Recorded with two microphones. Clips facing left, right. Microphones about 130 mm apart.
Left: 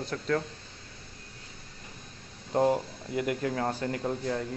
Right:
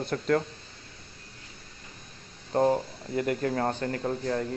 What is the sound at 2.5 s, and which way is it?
A man's voice, 10° left (ahead or behind).